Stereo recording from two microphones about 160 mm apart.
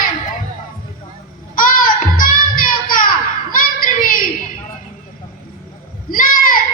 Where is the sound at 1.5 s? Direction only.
60° left (ahead or behind).